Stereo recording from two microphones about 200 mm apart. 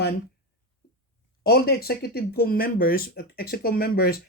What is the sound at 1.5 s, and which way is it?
Speech, 50° left (ahead or behind).